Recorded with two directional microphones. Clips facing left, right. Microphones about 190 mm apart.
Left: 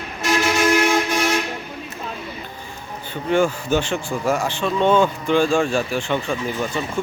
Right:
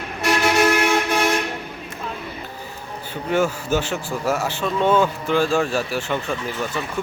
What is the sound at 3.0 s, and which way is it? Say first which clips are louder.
Speech: left 2 dB; 5° right (ahead or behind).